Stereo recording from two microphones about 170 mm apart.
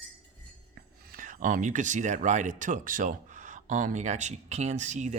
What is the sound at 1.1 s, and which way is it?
Speech, 50° right (ahead or behind).